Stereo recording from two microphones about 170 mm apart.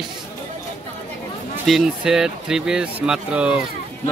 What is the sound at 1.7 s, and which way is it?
Speech, centre (ahead or behind).